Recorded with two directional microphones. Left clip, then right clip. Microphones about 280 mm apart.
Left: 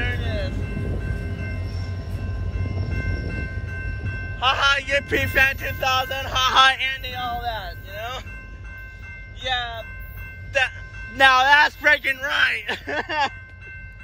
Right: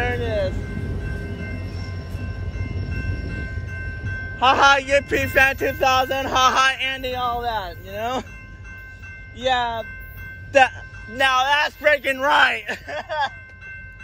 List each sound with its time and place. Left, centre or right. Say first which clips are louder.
0.0 s vehicle: right 6 dB; centre
4.4 s a man's voice: right 5 dB; centre
5.7 s music: right 4 dB; centre
6.5 s a man's voice: left 2 dB; centre
6.9 s a sound: right 3 dB; centre
9.4 s music: right 5 dB; centre
11.1 s a man's voice: left 4 dB; centre
12.1 s a man's voice: right 4 dB; centre